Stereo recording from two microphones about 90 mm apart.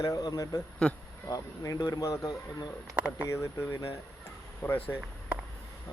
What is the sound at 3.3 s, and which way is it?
Speech, 35° left (ahead or behind).